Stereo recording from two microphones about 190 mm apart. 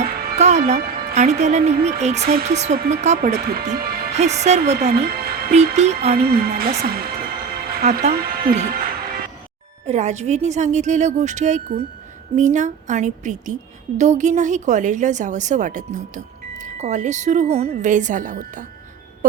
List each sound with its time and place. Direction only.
0.1 s music: 50° right (ahead or behind)
0.3 s music: 35° right (ahead or behind)
1.1 s a woman's voice: 35° right (ahead or behind)
3.8 s music: 50° right (ahead or behind)
4.1 s a woman's voice: 35° right (ahead or behind)
5.0 s music: 55° right (ahead or behind)
5.7 s a woman's voice: 35° right (ahead or behind)
6.1 s a woman's voice: 55° right (ahead or behind)
8.7 s music: 50° right (ahead or behind)
9.8 s a woman's voice: 35° right (ahead or behind)